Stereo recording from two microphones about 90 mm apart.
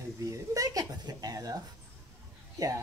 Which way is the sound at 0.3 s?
40° right (ahead or behind).